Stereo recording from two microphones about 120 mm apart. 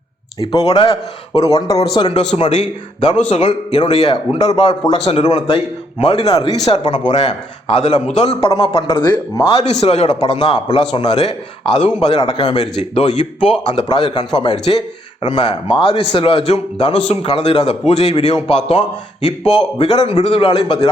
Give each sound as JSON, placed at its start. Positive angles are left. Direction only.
{"t": 0.3, "sound": "a man's voice", "side_deg": 50}
{"t": 1.5, "sound": "speech", "side_deg": 30}
{"t": 2.5, "sound": "a man's voice", "side_deg": 70}
{"t": 8.9, "sound": "speech", "side_deg": 35}
{"t": 9.6, "sound": "a man's voice", "side_deg": 60}
{"t": 12.2, "sound": "speech", "side_deg": 40}
{"t": 12.9, "sound": "a man's voice", "side_deg": 60}
{"t": 13.4, "sound": "a man's voice", "side_deg": 45}
{"t": 14.6, "sound": "a man's voice", "side_deg": 55}
{"t": 15.2, "sound": "a man's voice", "side_deg": 40}